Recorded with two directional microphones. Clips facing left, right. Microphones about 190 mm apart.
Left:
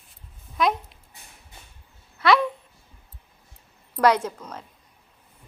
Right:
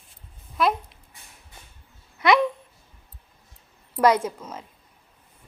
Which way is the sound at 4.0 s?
10° right (ahead or behind).